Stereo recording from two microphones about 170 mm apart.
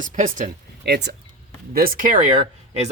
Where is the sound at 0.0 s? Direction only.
50° right (ahead or behind).